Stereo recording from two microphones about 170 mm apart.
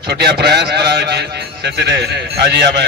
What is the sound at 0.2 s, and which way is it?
A man's voice, 75° right (ahead or behind).